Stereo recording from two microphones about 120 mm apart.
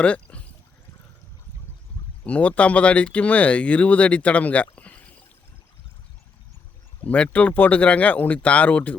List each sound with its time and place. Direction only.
0.0 s a sound: 10° left (ahead or behind)
2.2 s speech: 10° left (ahead or behind)
7.0 s speech: 10° left (ahead or behind)